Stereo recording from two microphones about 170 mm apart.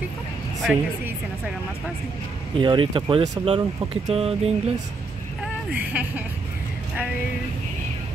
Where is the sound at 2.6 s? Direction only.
30° right (ahead or behind).